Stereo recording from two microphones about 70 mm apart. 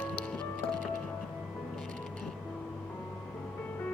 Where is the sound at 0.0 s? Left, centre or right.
Left.